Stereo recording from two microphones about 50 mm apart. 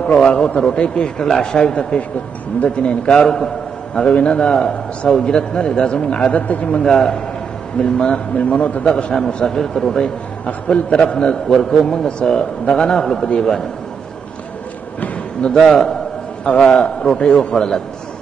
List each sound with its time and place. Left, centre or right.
0.0 s a man's voice: centre
3.2 s a man's voice: centre; by 6.8 s left
6.8 s a man's voice: centre; by 8.8 s left
8.8 s a man's voice: centre
11.4 s a man's voice: centre
15.4 s a man's voice: centre
16.7 s a man's voice: centre